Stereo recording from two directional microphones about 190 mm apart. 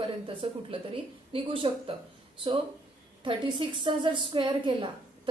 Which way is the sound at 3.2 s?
25° right (ahead or behind).